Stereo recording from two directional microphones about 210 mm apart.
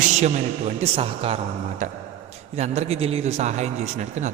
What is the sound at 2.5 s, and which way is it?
A man's voice, 30° right (ahead or behind).